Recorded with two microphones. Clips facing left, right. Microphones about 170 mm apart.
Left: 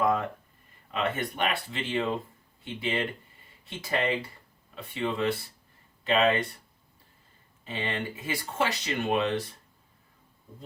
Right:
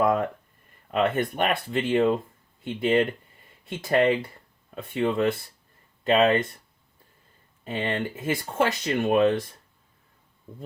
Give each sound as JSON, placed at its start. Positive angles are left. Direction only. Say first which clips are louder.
{"t": 0.0, "sound": "a sound", "louder": "right 4 dB", "side_deg": -55}
{"t": 0.9, "sound": "speech", "louder": "right 6 dB", "side_deg": -55}
{"t": 7.6, "sound": "speech", "louder": "right 5 dB", "side_deg": -50}